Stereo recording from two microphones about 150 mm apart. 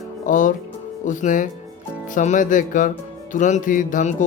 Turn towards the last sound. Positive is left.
turn(degrees=55)  # may be behind; listen again after turning